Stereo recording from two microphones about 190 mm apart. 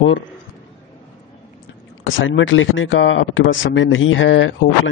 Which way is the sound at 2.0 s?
85° left.